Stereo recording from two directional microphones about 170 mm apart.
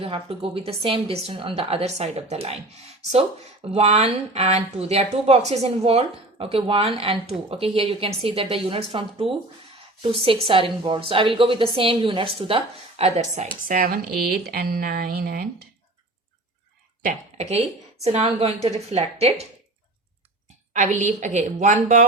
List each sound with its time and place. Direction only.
0.0 s speech: 35° right (ahead or behind)
13.7 s speech: 55° right (ahead or behind)
17.0 s speech: 45° right (ahead or behind)
20.7 s a woman's voice: 45° right (ahead or behind)